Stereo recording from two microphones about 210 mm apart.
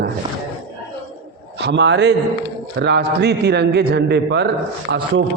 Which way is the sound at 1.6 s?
55° right (ahead or behind).